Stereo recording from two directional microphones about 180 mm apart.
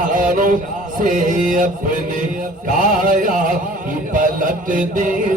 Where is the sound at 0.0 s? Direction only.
50° right (ahead or behind).